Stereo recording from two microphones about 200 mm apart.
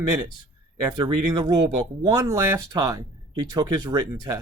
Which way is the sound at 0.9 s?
20° right (ahead or behind).